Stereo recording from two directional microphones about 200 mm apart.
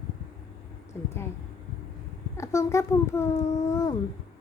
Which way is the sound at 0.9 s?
10° left (ahead or behind).